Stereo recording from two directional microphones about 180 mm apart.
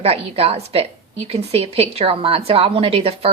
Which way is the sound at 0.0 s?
35° right (ahead or behind).